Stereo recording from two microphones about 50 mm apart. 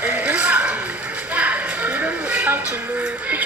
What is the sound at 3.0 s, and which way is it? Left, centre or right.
Music, right.